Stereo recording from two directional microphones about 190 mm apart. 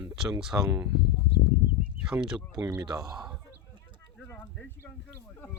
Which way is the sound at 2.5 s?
20° right (ahead or behind).